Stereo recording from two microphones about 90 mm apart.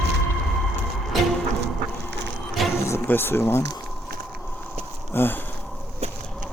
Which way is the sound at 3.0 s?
25° left (ahead or behind).